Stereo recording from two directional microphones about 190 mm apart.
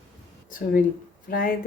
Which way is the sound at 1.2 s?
50° left (ahead or behind).